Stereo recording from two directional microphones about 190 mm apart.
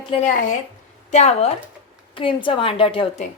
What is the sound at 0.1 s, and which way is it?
A woman's voice, 40° left (ahead or behind).